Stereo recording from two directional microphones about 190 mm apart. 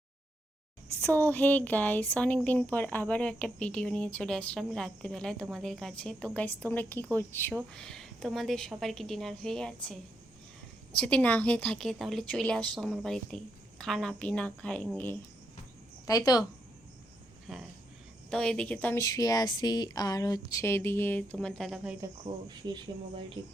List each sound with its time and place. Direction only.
1.0 s a woman's voice: 10° left (ahead or behind)
10.9 s a woman's voice: 5° left (ahead or behind)
16.0 s a woman's voice: 20° left (ahead or behind)
17.5 s a woman's voice: centre (ahead or behind)
22.0 s speech: 20° right (ahead or behind)